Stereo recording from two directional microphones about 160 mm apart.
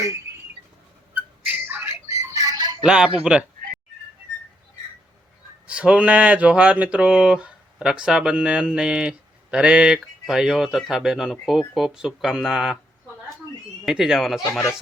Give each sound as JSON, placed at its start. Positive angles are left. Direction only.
{"t": 1.1, "sound": "a sound", "side_deg": -10}
{"t": 2.2, "sound": "music", "side_deg": -20}
{"t": 2.8, "sound": "speech", "side_deg": -5}
{"t": 5.6, "sound": "speech", "side_deg": -5}
{"t": 13.8, "sound": "speech", "side_deg": -5}